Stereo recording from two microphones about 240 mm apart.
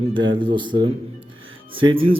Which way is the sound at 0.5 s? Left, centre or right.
Centre.